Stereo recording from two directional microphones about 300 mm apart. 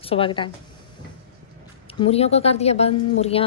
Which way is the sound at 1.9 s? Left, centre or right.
Centre.